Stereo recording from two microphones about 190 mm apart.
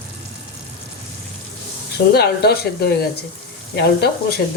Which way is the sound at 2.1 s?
55° left (ahead or behind).